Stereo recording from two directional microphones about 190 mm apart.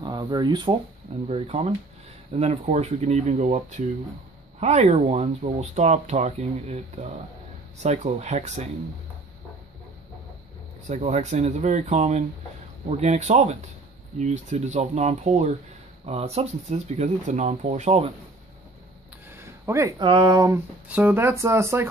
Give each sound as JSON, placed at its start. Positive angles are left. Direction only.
{"t": 0.0, "sound": "speech", "side_deg": -25}
{"t": 10.9, "sound": "speech", "side_deg": -35}
{"t": 19.3, "sound": "a sound", "side_deg": -15}
{"t": 20.1, "sound": "speech", "side_deg": -25}